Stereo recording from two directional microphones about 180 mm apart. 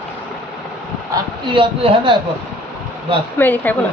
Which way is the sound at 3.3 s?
10° left (ahead or behind).